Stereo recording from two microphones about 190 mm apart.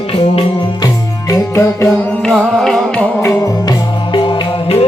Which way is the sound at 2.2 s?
Centre (ahead or behind).